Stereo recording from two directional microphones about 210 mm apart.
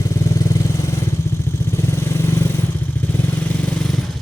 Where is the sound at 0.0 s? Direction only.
15° left (ahead or behind).